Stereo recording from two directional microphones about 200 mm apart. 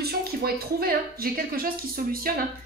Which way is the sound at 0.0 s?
50° right (ahead or behind).